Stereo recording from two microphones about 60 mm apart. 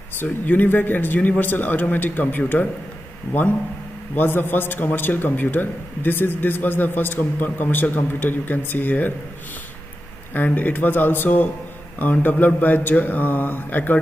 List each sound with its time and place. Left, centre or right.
0.2 s a man's voice: left
10.3 s a man's voice: left